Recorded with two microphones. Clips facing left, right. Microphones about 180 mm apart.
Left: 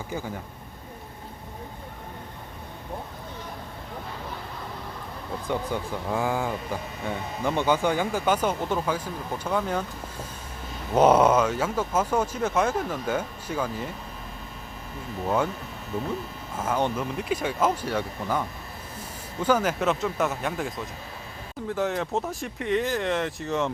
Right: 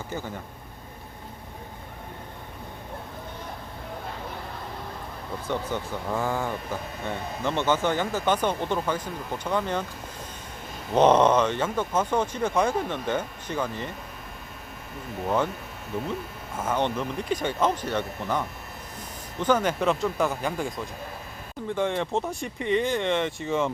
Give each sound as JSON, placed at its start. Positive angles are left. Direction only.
{"t": 5.5, "sound": "speech", "side_deg": 10}
{"t": 10.9, "sound": "speech", "side_deg": 10}
{"t": 16.6, "sound": "speech", "side_deg": 10}